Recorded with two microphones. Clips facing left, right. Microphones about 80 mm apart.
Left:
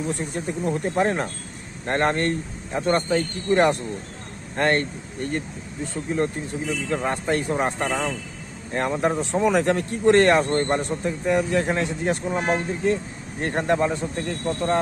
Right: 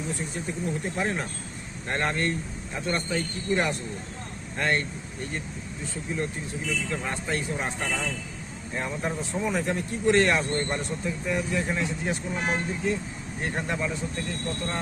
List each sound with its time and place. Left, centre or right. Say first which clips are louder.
0.1 s speech: left 5 dB; left
8.7 s speech: left 8 dB; left